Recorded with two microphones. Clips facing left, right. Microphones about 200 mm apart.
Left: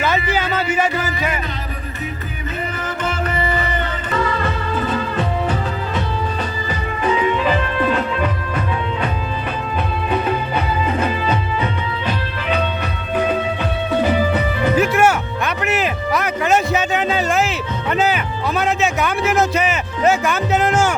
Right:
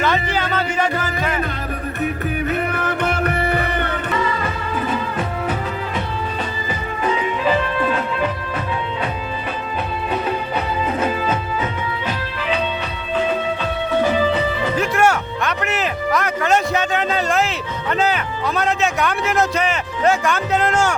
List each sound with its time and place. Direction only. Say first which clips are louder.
0.0 s music: left 1 dB; 5° left (ahead or behind)
2.5 s music: even; 65° right (ahead or behind)
4.4 s music: left 2 dB; 10° right (ahead or behind)
14.8 s music: left 2 dB; 5° left (ahead or behind)